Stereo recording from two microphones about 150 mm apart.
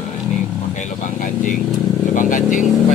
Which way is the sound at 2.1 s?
60° left (ahead or behind).